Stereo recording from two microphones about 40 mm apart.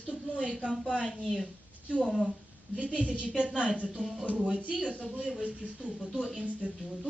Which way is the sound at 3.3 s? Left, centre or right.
Centre.